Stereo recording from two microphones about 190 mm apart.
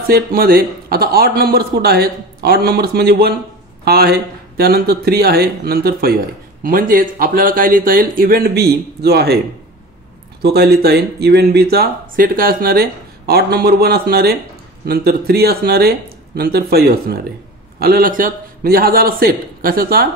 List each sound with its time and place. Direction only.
0.1 s a man's voice: 55° right (ahead or behind)
10.4 s a man's voice: 60° right (ahead or behind)